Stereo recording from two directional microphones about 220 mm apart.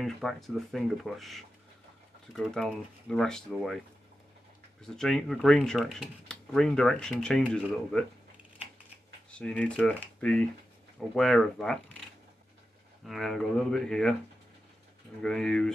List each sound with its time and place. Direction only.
0.0 s speech: centre (ahead or behind)
4.8 s speech: centre (ahead or behind)
9.3 s speech: 5° left (ahead or behind)
13.0 s speech: centre (ahead or behind)
15.2 s speech: 5° left (ahead or behind)